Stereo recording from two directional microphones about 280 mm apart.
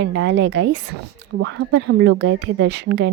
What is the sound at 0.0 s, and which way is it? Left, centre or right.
A woman's voice, right.